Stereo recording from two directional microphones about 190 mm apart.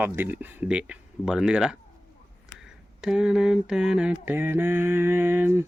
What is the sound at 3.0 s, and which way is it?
Speech, 5° right (ahead or behind).